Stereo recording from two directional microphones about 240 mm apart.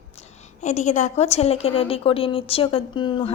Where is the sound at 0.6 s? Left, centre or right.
Left.